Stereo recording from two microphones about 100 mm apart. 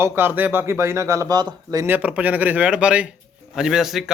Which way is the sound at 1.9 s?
15° right (ahead or behind).